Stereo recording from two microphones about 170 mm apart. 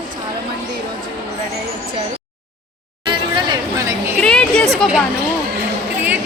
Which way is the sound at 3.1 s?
25° right (ahead or behind).